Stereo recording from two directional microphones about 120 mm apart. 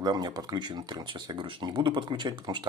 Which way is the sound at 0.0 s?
35° right (ahead or behind).